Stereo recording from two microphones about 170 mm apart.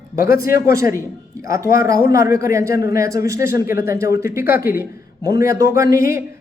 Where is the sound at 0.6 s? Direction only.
15° right (ahead or behind).